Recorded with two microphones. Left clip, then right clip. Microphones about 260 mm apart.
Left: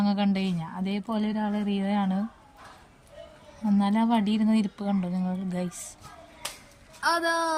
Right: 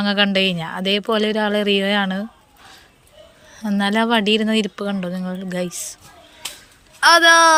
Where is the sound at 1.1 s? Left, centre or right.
Centre.